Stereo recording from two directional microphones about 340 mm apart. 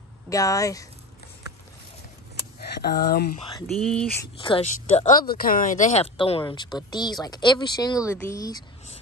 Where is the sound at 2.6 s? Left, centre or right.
Left.